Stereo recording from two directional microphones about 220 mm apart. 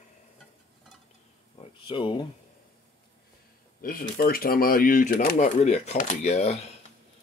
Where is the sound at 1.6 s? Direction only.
25° left (ahead or behind).